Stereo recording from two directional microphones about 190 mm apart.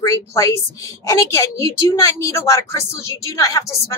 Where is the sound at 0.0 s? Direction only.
15° left (ahead or behind).